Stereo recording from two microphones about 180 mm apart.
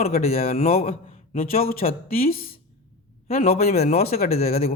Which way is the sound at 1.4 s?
55° left (ahead or behind).